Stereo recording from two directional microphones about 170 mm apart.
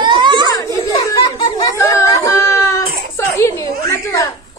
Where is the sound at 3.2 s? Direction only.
15° left (ahead or behind).